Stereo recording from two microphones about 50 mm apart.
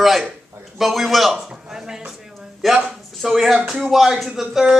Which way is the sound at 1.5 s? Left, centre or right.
Centre.